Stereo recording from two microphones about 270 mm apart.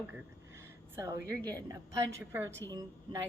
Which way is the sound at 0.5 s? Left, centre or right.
Centre.